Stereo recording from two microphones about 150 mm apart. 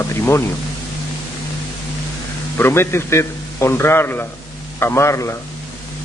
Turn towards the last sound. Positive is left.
turn(degrees=20)  # may be behind; listen again after turning